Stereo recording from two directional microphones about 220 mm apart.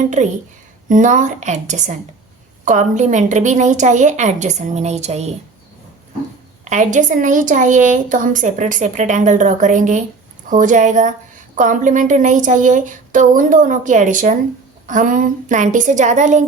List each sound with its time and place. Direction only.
0.2 s a woman's voice: 35° right (ahead or behind)
6.7 s a woman's voice: 35° right (ahead or behind)